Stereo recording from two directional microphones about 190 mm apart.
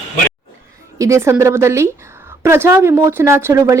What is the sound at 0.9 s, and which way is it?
Speech, 15° right (ahead or behind).